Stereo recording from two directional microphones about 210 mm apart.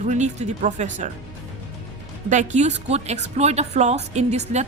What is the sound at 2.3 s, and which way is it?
A woman's voice, 35° right (ahead or behind).